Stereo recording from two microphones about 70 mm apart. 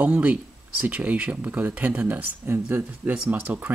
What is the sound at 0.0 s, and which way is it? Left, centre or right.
Speech, centre.